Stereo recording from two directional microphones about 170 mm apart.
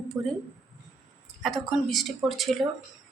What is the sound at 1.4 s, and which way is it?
A woman's voice, centre (ahead or behind).